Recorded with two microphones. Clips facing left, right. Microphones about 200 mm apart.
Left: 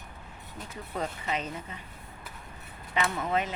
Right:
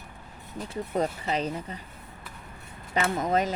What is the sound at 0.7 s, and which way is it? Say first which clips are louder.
Speech: right 7 dB; 35° right (ahead or behind).